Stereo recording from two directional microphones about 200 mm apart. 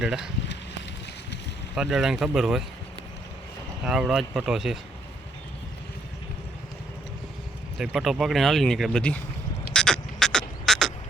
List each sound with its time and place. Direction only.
0.0 s speech: 5° right (ahead or behind)
1.7 s speech: centre (ahead or behind)
3.8 s speech: 5° right (ahead or behind)
7.8 s speech: centre (ahead or behind)
9.7 s frog: 5° left (ahead or behind)